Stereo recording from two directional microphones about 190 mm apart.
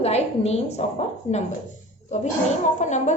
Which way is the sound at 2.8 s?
40° left (ahead or behind).